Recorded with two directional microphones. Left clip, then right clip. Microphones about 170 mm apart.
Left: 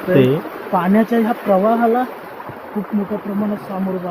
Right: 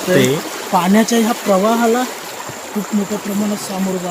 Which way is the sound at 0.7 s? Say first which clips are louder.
Right 2 dB; 40° right (ahead or behind).